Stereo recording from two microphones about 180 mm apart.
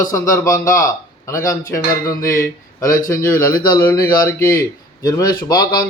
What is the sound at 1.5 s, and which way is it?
Speech, 20° left (ahead or behind).